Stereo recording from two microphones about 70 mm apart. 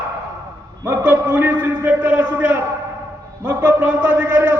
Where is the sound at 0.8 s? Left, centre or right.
Right.